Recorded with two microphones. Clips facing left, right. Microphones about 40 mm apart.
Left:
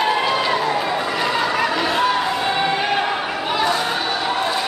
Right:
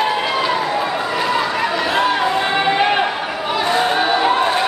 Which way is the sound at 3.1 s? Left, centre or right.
Centre.